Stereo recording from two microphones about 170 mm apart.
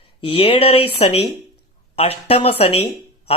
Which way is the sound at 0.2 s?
35° left (ahead or behind).